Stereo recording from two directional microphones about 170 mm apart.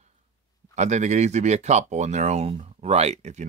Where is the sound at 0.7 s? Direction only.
45° right (ahead or behind).